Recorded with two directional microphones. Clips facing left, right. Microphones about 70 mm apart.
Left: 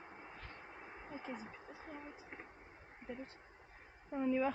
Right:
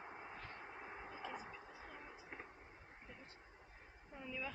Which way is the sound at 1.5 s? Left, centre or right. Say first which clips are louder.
Left 3 dB; left.